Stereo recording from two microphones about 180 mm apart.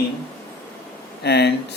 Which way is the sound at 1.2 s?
65° left (ahead or behind).